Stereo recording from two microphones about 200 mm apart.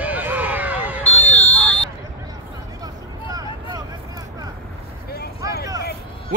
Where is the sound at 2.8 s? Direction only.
20° right (ahead or behind).